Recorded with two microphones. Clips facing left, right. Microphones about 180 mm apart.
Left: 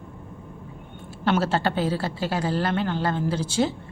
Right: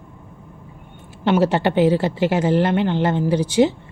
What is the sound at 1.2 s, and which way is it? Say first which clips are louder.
A woman's voice: right 5 dB; 15° right (ahead or behind).